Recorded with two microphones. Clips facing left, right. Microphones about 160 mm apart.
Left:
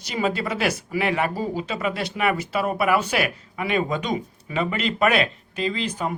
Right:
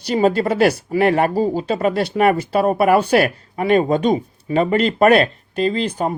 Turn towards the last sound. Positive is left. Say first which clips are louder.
# right 7 dB
turn(degrees=-40)  # may be behind; listen again after turning